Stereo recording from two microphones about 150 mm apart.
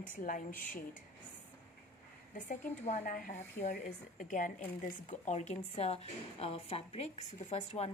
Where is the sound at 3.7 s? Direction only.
65° left (ahead or behind).